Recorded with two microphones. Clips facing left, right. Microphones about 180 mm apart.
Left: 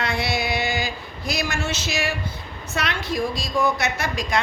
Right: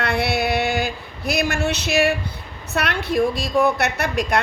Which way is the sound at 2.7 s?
60° right (ahead or behind).